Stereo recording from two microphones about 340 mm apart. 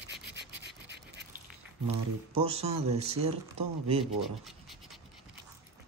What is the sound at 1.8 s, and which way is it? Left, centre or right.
Speech, centre.